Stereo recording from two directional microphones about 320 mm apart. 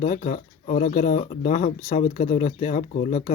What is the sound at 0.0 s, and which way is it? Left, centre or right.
Speech, left.